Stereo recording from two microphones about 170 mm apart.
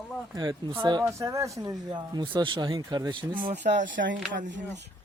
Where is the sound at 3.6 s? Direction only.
90° right.